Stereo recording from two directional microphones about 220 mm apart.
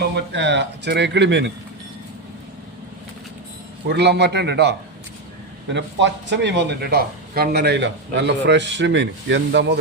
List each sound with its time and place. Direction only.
0.3 s speech: 55° right (ahead or behind)
3.8 s speech: 50° right (ahead or behind)
5.7 s speech: 55° right (ahead or behind)